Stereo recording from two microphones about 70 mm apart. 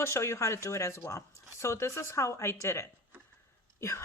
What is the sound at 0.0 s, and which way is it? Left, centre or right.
Speech, left.